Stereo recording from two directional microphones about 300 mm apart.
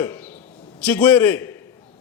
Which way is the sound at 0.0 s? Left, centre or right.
Centre.